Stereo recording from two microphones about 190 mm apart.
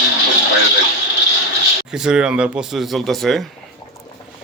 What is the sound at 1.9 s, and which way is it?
Speech, 5° right (ahead or behind).